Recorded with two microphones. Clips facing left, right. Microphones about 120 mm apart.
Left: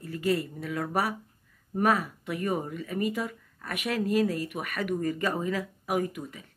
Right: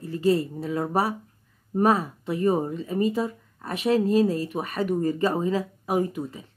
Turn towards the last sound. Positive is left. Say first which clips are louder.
# right 5 dB
turn(degrees=-30)  # may be behind; listen again after turning